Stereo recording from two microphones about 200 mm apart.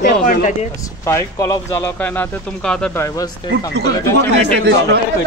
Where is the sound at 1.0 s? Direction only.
15° left (ahead or behind).